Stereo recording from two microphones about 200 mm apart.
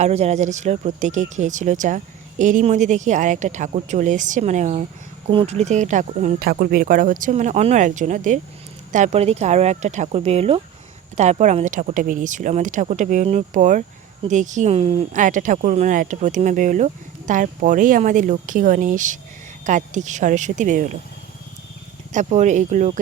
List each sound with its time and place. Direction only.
0.0 s speech: 30° right (ahead or behind)
22.1 s speech: 35° right (ahead or behind)